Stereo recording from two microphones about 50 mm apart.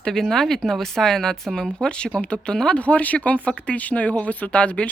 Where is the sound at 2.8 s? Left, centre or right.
Left.